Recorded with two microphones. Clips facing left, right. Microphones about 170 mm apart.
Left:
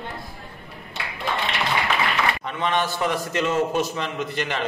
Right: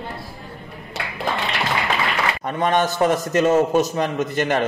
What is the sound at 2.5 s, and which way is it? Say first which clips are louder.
A man's voice: right 5 dB; 45° right (ahead or behind).